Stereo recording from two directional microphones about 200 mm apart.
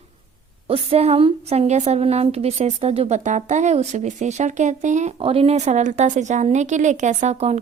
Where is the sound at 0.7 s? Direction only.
30° right (ahead or behind).